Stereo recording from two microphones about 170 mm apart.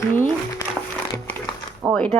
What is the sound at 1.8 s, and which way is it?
Speech, 5° right (ahead or behind).